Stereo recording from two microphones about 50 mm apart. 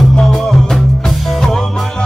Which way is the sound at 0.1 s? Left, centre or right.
Centre.